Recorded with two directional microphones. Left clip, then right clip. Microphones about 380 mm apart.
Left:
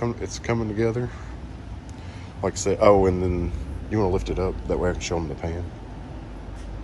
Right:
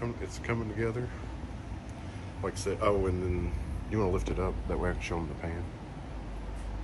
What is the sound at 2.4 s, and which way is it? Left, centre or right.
Speech, centre.